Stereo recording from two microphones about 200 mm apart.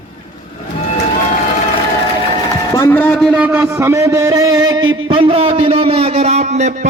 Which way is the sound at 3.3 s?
10° right (ahead or behind).